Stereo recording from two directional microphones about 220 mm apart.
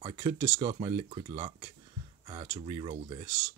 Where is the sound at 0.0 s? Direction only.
20° right (ahead or behind).